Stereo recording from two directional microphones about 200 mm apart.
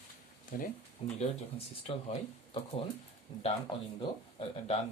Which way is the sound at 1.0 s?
30° left (ahead or behind).